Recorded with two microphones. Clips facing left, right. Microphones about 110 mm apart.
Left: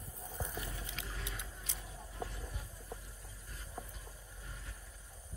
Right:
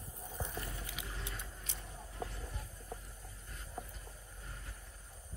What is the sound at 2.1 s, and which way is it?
Clip-clop, 15° left (ahead or behind).